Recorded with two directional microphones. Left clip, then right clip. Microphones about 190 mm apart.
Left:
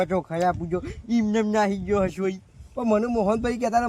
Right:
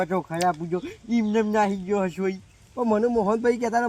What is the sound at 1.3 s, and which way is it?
Speech, 20° left (ahead or behind).